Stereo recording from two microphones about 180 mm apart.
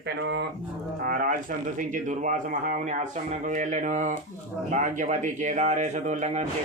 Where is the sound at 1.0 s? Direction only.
50° right (ahead or behind).